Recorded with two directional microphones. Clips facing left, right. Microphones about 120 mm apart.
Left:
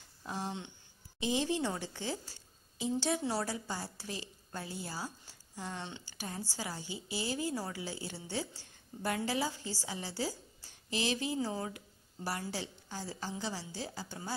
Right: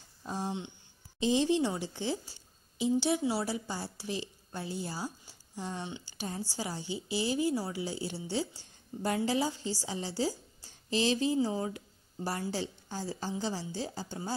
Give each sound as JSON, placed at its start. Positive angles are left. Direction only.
{"t": 0.3, "sound": "a woman's voice", "side_deg": -15}
{"t": 1.2, "sound": "a woman's voice", "side_deg": -25}
{"t": 3.2, "sound": "a woman's voice", "side_deg": -5}
{"t": 3.4, "sound": "a woman's voice", "side_deg": -15}